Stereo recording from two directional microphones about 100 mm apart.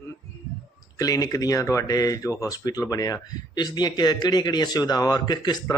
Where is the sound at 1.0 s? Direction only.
35° left (ahead or behind).